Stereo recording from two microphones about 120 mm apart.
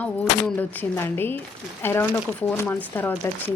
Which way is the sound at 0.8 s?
20° left (ahead or behind).